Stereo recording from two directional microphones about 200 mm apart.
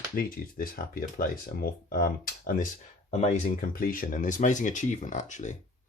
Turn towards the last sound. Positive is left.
turn(degrees=35)  # may be behind; listen again after turning